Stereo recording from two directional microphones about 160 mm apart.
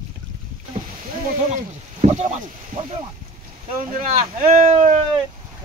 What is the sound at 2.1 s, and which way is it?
Speech, 45° right (ahead or behind).